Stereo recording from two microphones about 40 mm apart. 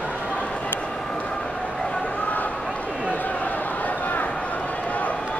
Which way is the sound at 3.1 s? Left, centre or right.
Left.